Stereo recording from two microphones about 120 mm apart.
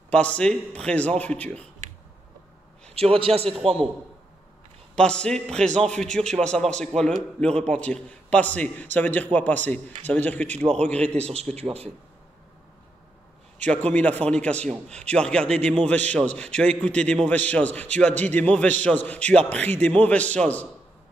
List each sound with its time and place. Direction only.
0.1 s a man's voice: 10° left (ahead or behind)
3.0 s a man's voice: 50° right (ahead or behind)
4.9 s a man's voice: 5° left (ahead or behind)
10.5 s a man's voice: 65° right (ahead or behind)
10.8 s a man's voice: 10° left (ahead or behind)
13.6 s a man's voice: 10° left (ahead or behind)